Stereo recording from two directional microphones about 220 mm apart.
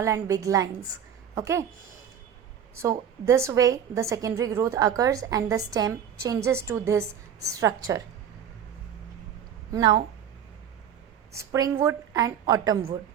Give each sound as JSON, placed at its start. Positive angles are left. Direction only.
{"t": 0.0, "sound": "a woman's voice", "side_deg": -15}
{"t": 3.2, "sound": "a woman's voice", "side_deg": -15}
{"t": 9.7, "sound": "a woman's voice", "side_deg": -20}
{"t": 11.3, "sound": "a woman's voice", "side_deg": -15}